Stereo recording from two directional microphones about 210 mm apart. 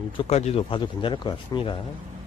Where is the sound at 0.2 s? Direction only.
30° left (ahead or behind).